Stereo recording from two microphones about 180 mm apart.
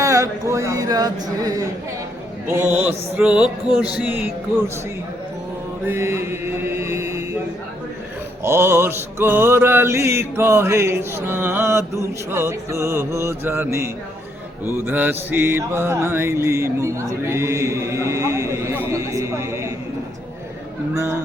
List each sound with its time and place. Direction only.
0.0 s speech: 15° right (ahead or behind)
2.5 s mantra: 10° right (ahead or behind)
5.8 s mantra: 15° right (ahead or behind)
8.4 s mantra: 15° right (ahead or behind)
20.9 s a man's voice: 15° right (ahead or behind)